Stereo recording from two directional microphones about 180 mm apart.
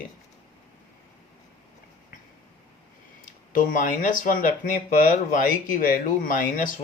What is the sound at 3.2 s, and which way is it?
Speech, 45° left (ahead or behind).